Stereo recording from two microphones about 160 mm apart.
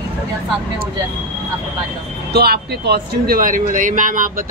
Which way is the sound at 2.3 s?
85° right.